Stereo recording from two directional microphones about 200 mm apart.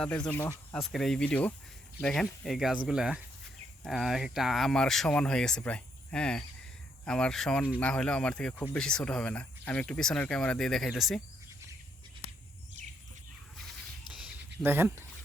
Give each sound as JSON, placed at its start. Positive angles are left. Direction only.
{"t": 0.0, "sound": "speech", "side_deg": 5}
{"t": 12.8, "sound": "bird", "side_deg": -35}
{"t": 14.2, "sound": "a sound", "side_deg": -10}